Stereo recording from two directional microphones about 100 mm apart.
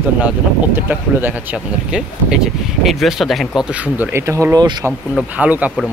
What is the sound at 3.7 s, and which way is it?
Speech, 15° right (ahead or behind).